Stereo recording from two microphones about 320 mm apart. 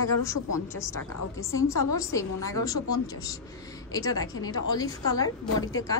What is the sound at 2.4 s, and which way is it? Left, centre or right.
Speech, centre.